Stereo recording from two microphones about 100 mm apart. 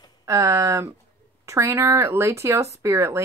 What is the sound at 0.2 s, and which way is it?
A woman's voice, 30° right (ahead or behind).